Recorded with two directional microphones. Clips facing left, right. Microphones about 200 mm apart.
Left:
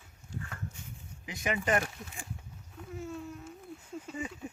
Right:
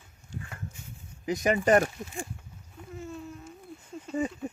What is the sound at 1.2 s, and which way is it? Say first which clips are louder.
Speech: right 8 dB; 40° right (ahead or behind).